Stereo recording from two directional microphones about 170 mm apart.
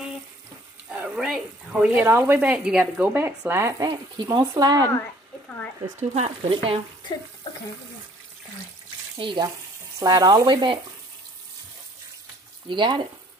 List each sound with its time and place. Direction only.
0.8 s speech: 5° right (ahead or behind); by 4.8 s 20° right (ahead or behind)
5.9 s speech: 40° right (ahead or behind)
9.1 s speech: 25° right (ahead or behind)
12.6 s speech: 30° right (ahead or behind)